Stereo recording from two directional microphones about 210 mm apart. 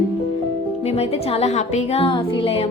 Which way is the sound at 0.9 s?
30° left (ahead or behind).